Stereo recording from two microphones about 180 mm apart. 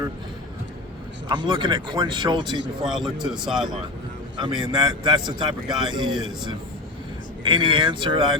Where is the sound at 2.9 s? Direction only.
Centre (ahead or behind).